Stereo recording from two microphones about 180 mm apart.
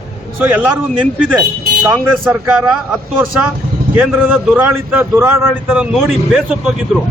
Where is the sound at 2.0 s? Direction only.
5° left (ahead or behind).